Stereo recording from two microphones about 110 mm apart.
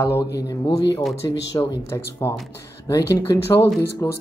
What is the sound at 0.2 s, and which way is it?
Speech, 35° left (ahead or behind).